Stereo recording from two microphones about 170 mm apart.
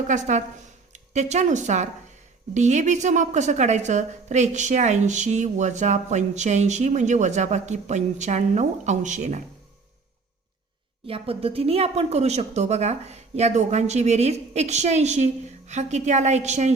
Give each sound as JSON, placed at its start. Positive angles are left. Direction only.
{"t": 0.1, "sound": "a woman's voice", "side_deg": -45}
{"t": 11.0, "sound": "speech", "side_deg": -35}